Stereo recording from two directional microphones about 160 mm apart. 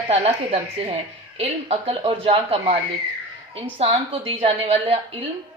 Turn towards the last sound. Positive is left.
turn(degrees=-35)  # may be behind; listen again after turning